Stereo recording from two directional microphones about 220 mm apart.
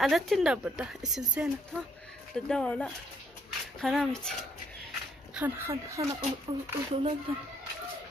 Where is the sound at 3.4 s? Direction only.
Centre (ahead or behind).